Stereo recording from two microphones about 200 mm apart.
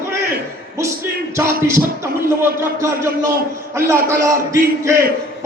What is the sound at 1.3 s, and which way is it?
Speech, 15° right (ahead or behind).